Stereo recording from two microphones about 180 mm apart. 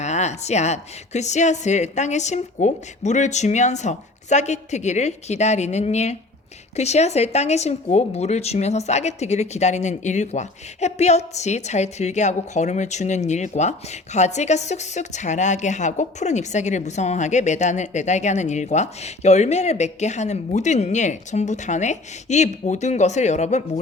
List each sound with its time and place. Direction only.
0.0 s speech: 40° left (ahead or behind)